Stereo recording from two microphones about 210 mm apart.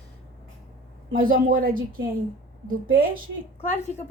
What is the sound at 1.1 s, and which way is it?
Speech, 40° right (ahead or behind).